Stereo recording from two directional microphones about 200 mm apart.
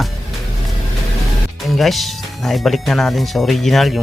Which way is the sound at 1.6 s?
Centre (ahead or behind).